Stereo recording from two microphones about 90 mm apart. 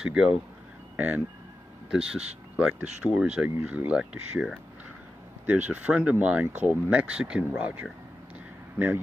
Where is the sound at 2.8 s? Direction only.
10° right (ahead or behind).